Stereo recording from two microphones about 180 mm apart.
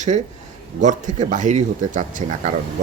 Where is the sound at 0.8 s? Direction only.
45° right (ahead or behind).